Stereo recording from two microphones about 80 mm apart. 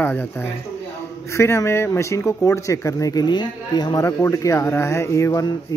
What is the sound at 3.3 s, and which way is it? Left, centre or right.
Speech, left.